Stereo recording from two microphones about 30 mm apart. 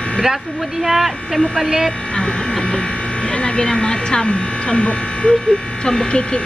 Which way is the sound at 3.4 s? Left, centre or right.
Left.